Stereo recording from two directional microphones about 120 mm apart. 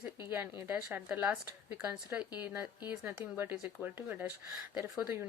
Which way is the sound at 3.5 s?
5° right (ahead or behind).